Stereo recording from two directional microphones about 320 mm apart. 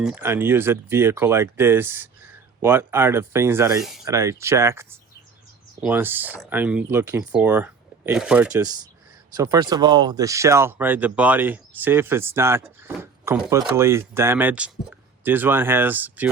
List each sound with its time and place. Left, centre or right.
0.0 s speech: centre